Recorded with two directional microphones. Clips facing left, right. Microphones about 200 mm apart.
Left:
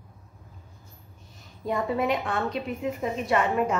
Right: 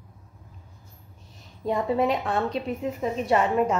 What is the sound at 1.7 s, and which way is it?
A woman's voice, 30° right (ahead or behind).